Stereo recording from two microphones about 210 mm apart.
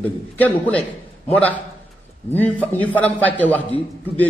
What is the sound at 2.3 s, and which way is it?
A man's voice, 10° left (ahead or behind).